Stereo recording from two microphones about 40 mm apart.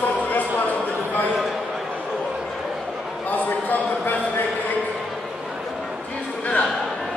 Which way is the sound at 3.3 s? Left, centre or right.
Left.